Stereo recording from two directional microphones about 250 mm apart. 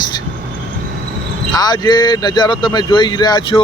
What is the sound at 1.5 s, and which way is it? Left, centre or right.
Speech, centre.